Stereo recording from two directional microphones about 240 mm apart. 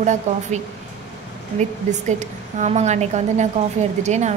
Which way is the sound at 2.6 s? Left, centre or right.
Right.